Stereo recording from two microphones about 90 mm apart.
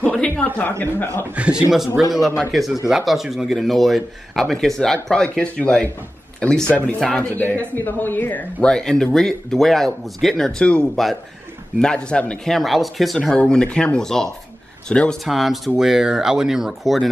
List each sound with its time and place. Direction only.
0.0 s speech: 10° left (ahead or behind)
1.3 s a man's voice: 10° right (ahead or behind); by 8.6 s 20° left (ahead or behind)
8.6 s speech: 10° left (ahead or behind)